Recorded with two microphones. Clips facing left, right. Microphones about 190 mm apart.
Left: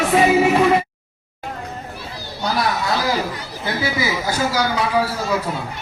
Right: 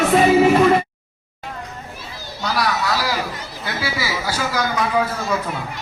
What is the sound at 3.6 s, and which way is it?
Chatter, 20° left (ahead or behind).